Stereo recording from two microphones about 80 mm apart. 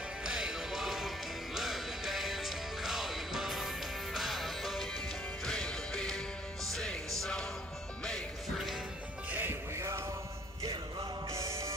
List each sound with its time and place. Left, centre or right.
0.2 s music: centre
9.3 s music: right
11.3 s music: right